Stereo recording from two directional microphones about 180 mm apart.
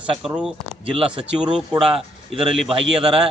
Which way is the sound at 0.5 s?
30° right (ahead or behind).